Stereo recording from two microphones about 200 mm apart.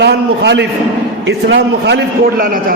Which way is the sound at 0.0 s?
60° right (ahead or behind).